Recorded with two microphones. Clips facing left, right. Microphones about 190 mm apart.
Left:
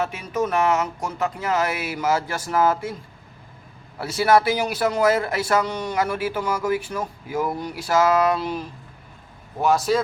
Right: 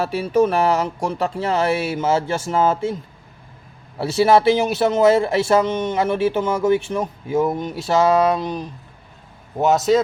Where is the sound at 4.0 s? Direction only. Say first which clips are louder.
Right 3 dB; 25° right (ahead or behind).